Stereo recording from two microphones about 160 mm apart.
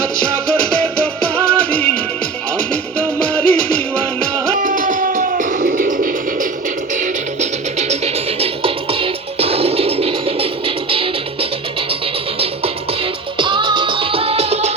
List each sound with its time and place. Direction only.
1.2 s music: 10° left (ahead or behind)
3.0 s music: 10° left (ahead or behind)
4.6 s music: 55° right (ahead or behind)
7.8 s music: 40° right (ahead or behind)
13.4 s music: 30° right (ahead or behind)